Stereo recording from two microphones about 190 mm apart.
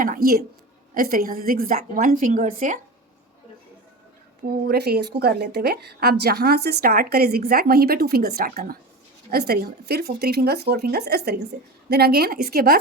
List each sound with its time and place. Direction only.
0.0 s a woman's voice: 45° right (ahead or behind)
4.6 s a woman's voice: 55° right (ahead or behind)